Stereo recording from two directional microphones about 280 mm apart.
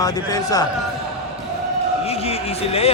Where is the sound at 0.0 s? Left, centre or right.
Centre.